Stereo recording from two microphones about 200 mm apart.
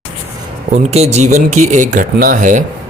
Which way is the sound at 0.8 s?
35° right (ahead or behind).